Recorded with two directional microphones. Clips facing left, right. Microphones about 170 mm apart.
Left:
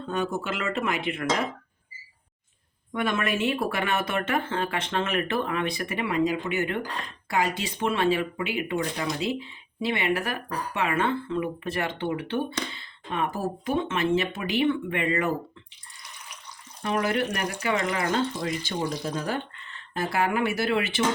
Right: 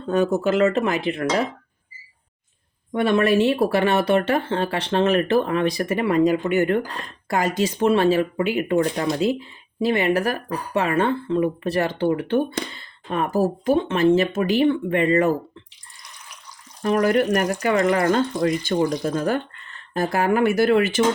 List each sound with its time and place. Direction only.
0.1 s speech: 40° right (ahead or behind)
2.9 s speech: 35° right (ahead or behind)
16.8 s speech: 45° right (ahead or behind)